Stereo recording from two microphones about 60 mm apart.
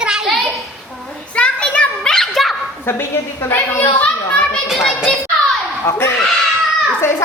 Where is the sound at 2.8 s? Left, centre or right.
Left.